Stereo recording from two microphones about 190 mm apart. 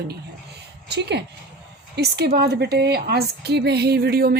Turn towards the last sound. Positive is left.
turn(degrees=-55)  # may be behind; listen again after turning